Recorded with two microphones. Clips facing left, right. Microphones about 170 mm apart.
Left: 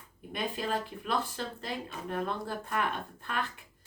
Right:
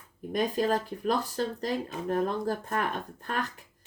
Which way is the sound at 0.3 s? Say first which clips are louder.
Right 7 dB; 40° right (ahead or behind).